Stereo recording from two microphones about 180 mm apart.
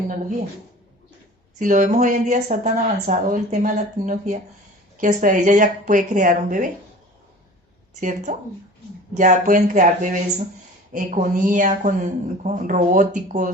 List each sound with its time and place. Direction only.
1.5 s speech: 45° right (ahead or behind)
8.0 s speech: 45° right (ahead or behind)